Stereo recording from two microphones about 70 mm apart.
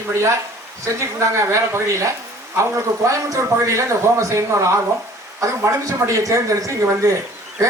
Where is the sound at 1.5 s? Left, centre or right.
Right.